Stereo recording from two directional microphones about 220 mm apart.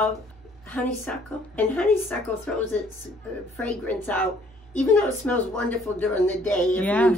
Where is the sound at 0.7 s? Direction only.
5° left (ahead or behind).